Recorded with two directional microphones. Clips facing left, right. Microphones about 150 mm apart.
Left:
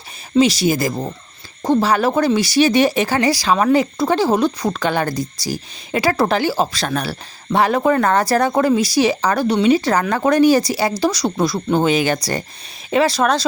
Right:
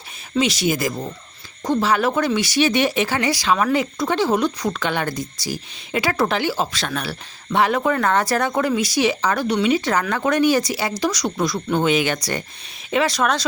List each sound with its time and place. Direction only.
0.3 s speech: 35° left (ahead or behind)